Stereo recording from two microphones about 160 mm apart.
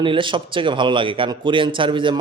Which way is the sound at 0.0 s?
30° right (ahead or behind).